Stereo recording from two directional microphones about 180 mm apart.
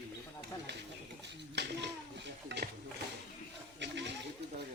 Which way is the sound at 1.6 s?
70° right (ahead or behind).